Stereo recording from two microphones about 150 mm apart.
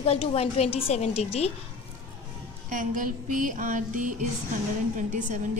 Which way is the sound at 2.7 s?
60° right (ahead or behind).